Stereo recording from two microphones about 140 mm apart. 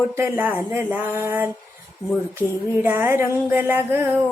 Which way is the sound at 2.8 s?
15° right (ahead or behind).